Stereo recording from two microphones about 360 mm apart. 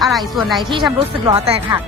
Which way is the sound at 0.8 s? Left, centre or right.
Centre.